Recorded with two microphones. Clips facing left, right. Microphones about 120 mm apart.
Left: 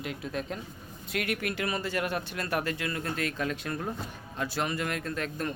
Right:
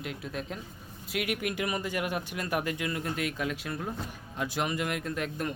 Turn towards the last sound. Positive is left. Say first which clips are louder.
# even
turn(degrees=-15)  # may be behind; listen again after turning